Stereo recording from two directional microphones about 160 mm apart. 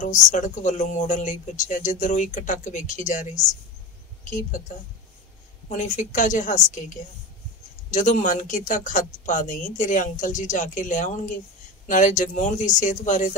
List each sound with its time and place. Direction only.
0.0 s speech: 50° left (ahead or behind)
5.7 s speech: 50° left (ahead or behind)